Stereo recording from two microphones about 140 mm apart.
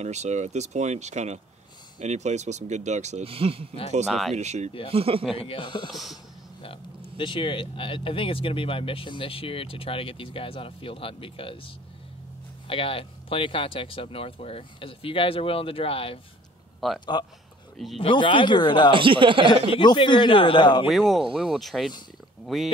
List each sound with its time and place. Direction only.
0.0 s speech: 55° right (ahead or behind)
4.1 s speech: centre (ahead or behind)
4.4 s speech: 55° right (ahead or behind)
4.9 s speech: 40° right (ahead or behind)
5.3 s speech: 40° left (ahead or behind)
18.9 s speech: 35° right (ahead or behind)
19.7 s speech: 35° left (ahead or behind)
20.8 s speech: centre (ahead or behind)